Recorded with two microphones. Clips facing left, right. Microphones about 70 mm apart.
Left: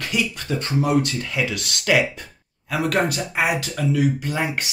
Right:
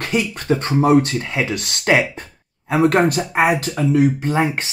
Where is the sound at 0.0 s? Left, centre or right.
Right.